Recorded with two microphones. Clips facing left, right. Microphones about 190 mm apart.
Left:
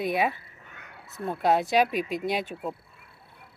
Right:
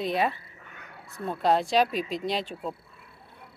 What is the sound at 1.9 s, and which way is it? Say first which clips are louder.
Speech: left 1 dB; 50° left (ahead or behind).